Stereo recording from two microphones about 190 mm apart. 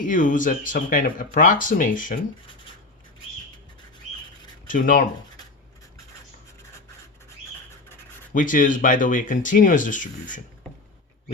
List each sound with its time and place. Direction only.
0.0 s speech: 45° left (ahead or behind)
4.7 s speech: 45° left (ahead or behind)
8.3 s speech: 45° left (ahead or behind)